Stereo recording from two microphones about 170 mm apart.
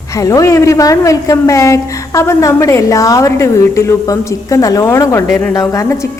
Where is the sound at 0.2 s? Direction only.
20° left (ahead or behind).